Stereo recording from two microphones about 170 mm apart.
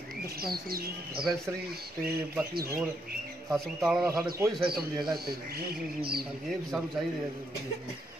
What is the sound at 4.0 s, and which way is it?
Speech, 20° right (ahead or behind).